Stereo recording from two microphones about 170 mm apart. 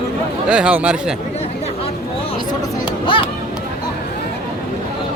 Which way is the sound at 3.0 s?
30° left (ahead or behind).